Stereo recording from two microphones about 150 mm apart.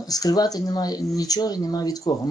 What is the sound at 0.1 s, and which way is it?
Speech, 25° left (ahead or behind).